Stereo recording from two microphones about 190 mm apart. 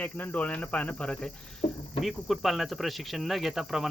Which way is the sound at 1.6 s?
30° left (ahead or behind).